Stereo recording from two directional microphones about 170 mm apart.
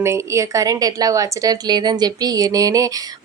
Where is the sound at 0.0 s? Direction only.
15° right (ahead or behind).